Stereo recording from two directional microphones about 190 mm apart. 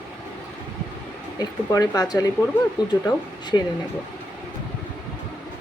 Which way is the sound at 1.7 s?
20° left (ahead or behind).